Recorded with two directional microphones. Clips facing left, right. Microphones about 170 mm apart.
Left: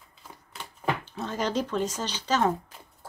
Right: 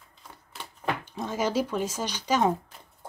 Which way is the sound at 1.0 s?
15° right (ahead or behind).